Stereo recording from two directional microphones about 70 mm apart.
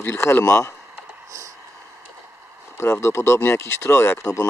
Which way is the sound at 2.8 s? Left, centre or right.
Left.